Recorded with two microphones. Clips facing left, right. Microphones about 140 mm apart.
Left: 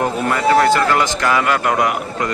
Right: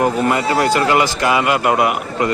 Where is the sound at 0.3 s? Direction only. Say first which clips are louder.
Left 2 dB; 20° right (ahead or behind).